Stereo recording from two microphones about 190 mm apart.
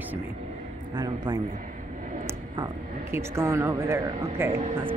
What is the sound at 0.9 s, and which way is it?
A man's voice, 20° right (ahead or behind).